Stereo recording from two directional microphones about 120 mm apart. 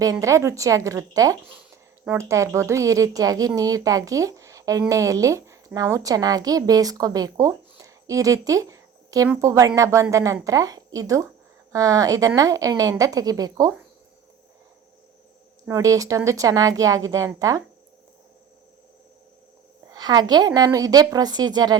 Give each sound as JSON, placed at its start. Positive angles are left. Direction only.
{"t": 0.0, "sound": "speech", "side_deg": -30}
{"t": 15.6, "sound": "speech", "side_deg": -25}
{"t": 19.9, "sound": "a woman's voice", "side_deg": -35}